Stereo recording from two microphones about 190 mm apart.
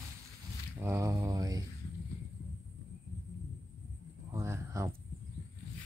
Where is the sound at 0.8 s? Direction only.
15° right (ahead or behind).